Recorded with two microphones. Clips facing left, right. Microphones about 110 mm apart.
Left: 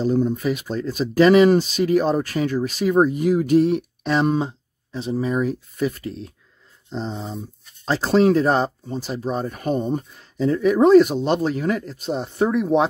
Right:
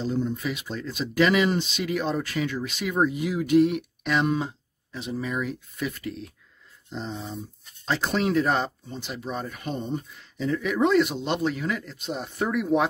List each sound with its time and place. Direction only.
0.0 s speech: 45° left (ahead or behind); by 12.8 s 25° left (ahead or behind)